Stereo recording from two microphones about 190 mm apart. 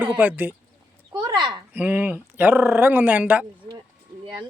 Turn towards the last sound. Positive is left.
turn(degrees=-10)  # may be behind; listen again after turning